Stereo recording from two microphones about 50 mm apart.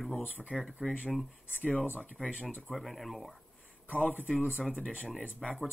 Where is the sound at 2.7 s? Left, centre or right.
Centre.